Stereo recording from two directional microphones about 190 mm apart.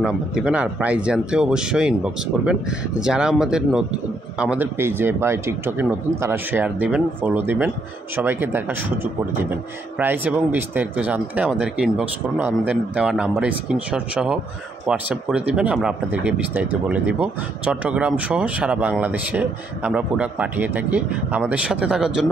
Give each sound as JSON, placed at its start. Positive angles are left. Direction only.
{"t": 0.0, "sound": "speech", "side_deg": -5}